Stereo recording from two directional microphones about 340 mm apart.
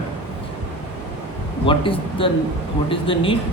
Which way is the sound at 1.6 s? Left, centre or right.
Centre.